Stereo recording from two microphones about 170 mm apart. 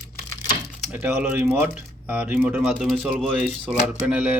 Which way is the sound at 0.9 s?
10° right (ahead or behind).